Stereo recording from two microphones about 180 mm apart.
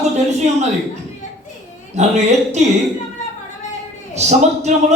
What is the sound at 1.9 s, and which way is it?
Speech, 40° right (ahead or behind).